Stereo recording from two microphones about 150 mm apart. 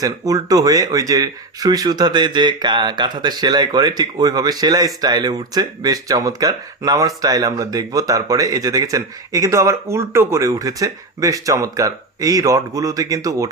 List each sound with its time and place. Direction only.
0.0 s speech: 25° right (ahead or behind)